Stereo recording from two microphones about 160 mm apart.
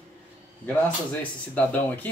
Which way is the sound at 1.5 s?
10° left (ahead or behind).